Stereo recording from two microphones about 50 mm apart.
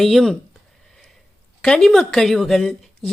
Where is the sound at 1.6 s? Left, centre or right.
Centre.